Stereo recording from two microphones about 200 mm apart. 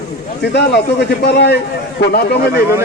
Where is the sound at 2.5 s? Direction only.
15° right (ahead or behind).